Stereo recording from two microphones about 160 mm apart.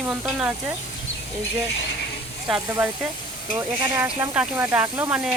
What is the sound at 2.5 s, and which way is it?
Speech, 5° right (ahead or behind).